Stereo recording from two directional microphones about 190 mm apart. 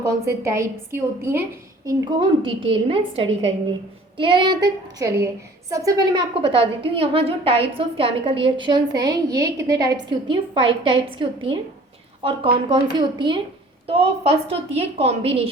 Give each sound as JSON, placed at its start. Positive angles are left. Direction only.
{"t": 0.0, "sound": "a woman's voice", "side_deg": -15}